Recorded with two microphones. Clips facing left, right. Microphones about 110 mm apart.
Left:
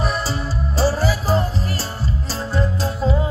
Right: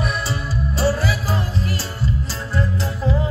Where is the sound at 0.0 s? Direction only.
30° left (ahead or behind).